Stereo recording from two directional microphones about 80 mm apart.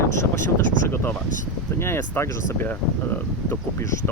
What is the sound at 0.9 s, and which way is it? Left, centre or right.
Speech, left.